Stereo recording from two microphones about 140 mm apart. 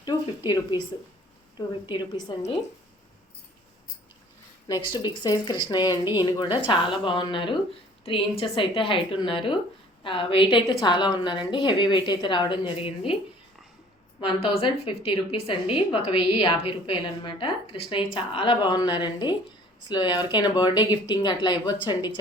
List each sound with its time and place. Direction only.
0.0 s a woman's voice: 30° left (ahead or behind)
5.0 s a woman's voice: 30° left (ahead or behind)
14.2 s a woman's voice: 35° left (ahead or behind)